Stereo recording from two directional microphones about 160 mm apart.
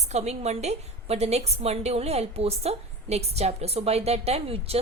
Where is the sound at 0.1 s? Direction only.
45° right (ahead or behind).